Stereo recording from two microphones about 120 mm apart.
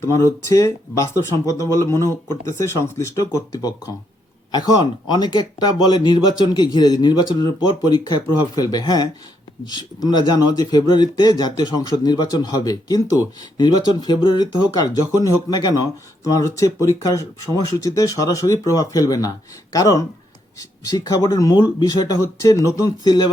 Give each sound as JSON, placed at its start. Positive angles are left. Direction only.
{"t": 0.1, "sound": "speech", "side_deg": 25}